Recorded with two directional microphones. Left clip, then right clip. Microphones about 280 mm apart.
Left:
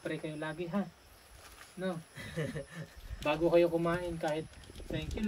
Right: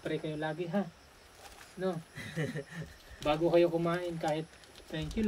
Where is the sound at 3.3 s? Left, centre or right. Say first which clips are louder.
Even; centre.